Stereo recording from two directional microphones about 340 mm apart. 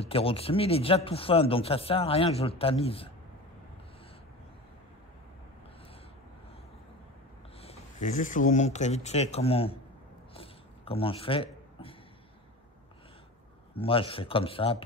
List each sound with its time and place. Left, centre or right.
0.0 s speech: centre
7.6 s speech: left
10.3 s a sound: centre
13.7 s speech: centre